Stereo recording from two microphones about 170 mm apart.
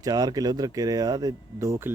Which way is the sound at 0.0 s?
20° right (ahead or behind).